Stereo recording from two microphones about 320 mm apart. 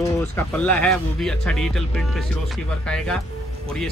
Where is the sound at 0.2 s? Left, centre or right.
Centre.